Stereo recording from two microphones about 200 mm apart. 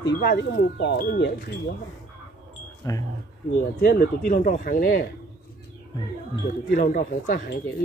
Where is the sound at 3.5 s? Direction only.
50° left (ahead or behind).